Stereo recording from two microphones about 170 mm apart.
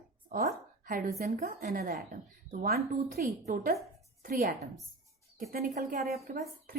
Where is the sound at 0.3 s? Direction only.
50° right (ahead or behind).